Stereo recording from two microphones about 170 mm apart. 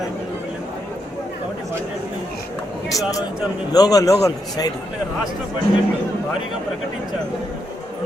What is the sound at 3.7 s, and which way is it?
A man's voice, 20° left (ahead or behind).